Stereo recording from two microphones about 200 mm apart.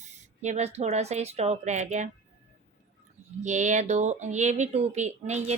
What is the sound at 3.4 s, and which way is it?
Speech, 35° right (ahead or behind).